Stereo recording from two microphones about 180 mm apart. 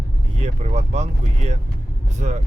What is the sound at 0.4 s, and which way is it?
Speech, 40° right (ahead or behind).